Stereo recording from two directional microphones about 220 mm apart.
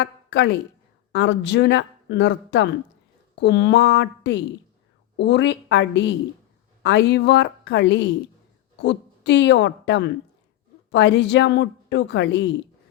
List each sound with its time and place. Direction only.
0.0 s a woman's voice: 50° left (ahead or behind)